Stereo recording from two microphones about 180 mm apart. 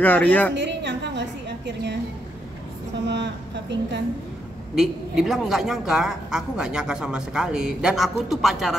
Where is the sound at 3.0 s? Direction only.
75° right (ahead or behind).